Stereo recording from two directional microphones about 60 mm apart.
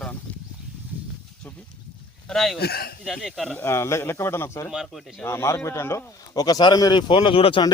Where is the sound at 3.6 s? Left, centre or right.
Left.